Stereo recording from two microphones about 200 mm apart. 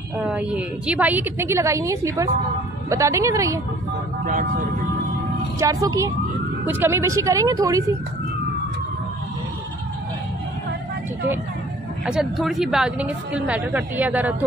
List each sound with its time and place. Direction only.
0.2 s a woman's voice: 5° right (ahead or behind)
5.6 s a woman's voice: 15° right (ahead or behind)
12.1 s a woman's voice: centre (ahead or behind)